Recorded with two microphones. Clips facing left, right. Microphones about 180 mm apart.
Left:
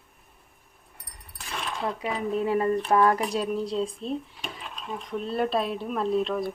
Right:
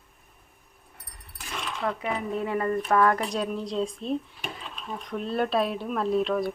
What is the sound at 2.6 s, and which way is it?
Speech, 20° left (ahead or behind).